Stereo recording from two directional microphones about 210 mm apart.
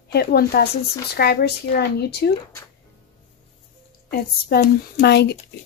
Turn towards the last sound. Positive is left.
turn(degrees=50)  # may be behind; listen again after turning